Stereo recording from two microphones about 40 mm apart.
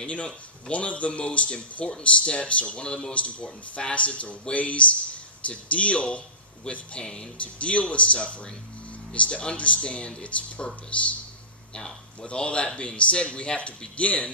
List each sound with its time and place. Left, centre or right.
0.0 s a man's voice: left
7.0 s speech: centre
7.3 s a man's voice: left